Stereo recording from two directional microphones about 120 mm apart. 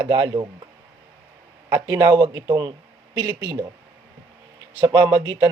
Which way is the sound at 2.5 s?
35° right (ahead or behind).